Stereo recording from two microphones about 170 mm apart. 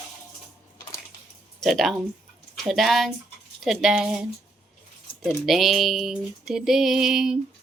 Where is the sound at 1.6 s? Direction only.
Centre (ahead or behind).